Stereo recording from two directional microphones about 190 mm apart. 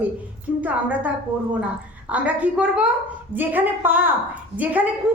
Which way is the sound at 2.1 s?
5° right (ahead or behind).